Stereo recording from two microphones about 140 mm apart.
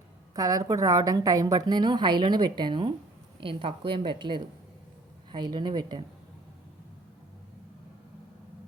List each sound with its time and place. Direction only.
0.3 s a woman's voice: 25° right (ahead or behind)